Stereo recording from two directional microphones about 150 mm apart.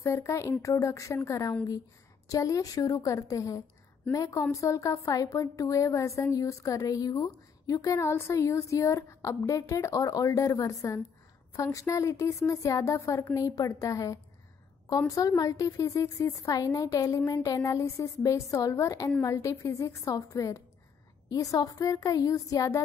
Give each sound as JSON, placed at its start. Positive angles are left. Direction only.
{"t": 0.0, "sound": "a woman's voice", "side_deg": 20}